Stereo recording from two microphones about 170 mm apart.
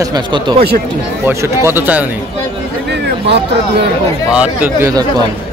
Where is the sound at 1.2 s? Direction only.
15° right (ahead or behind).